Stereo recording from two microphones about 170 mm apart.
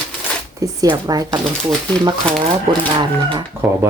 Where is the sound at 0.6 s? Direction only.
20° right (ahead or behind).